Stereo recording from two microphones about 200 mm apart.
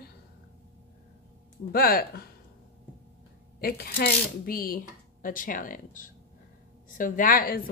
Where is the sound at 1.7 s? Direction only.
50° left (ahead or behind).